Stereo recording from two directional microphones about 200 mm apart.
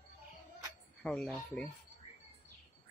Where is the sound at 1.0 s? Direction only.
5° left (ahead or behind).